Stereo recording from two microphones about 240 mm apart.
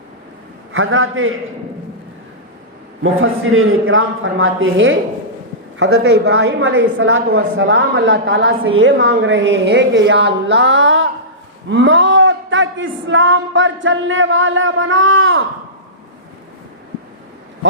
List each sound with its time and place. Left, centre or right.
0.7 s a man's voice: right
3.0 s a man's voice: right